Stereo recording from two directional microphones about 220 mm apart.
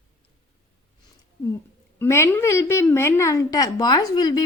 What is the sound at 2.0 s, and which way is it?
A woman's voice, 10° left (ahead or behind).